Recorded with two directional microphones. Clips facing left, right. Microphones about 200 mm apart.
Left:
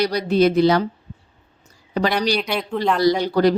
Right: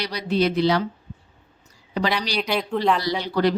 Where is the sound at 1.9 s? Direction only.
45° left (ahead or behind).